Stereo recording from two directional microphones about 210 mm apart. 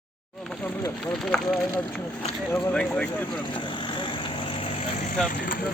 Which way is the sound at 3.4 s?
25° left (ahead or behind).